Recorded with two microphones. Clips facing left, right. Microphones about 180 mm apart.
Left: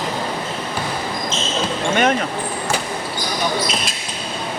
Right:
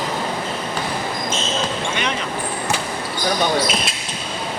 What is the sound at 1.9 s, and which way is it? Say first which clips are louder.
Basketball bounce: left 7 dB; 50° left (ahead or behind).